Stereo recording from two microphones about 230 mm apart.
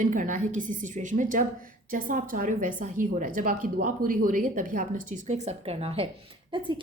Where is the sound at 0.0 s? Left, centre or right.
Right.